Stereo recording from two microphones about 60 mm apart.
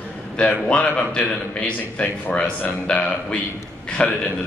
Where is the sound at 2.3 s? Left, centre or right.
Left.